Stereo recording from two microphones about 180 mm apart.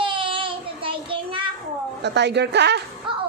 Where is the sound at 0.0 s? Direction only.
30° right (ahead or behind).